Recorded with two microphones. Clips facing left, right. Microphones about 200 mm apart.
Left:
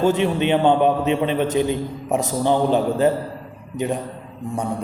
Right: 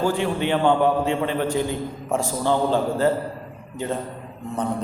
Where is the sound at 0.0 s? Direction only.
20° left (ahead or behind).